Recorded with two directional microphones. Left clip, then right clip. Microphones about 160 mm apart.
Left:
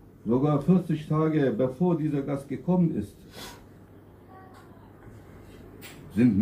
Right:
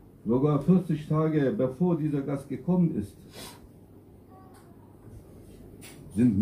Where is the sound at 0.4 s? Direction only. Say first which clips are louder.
Even; 15° right (ahead or behind).